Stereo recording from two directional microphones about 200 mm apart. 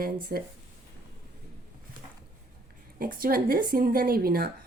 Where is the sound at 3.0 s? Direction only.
45° right (ahead or behind).